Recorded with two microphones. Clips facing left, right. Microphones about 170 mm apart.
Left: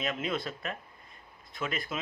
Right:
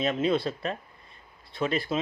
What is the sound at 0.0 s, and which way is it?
Speech, 30° right (ahead or behind).